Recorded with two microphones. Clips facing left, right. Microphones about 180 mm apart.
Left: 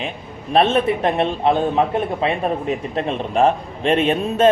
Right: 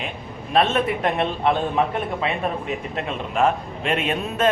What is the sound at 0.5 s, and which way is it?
A man's voice, 30° left (ahead or behind).